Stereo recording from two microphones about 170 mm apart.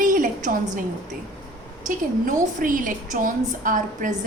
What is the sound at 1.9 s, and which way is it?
A woman's voice, 50° right (ahead or behind).